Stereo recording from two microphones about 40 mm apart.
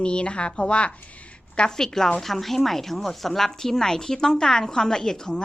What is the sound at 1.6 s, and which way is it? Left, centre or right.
A woman's voice, centre.